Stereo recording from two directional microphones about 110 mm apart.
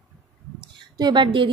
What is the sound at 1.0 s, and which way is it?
Speech, 45° right (ahead or behind).